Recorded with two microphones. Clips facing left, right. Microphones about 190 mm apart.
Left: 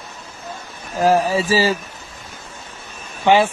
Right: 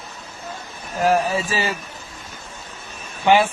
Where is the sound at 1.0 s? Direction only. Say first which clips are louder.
Left 3 dB; 35° left (ahead or behind).